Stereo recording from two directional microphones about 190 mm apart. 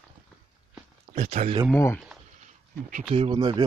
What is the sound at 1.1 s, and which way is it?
Speech, 35° right (ahead or behind).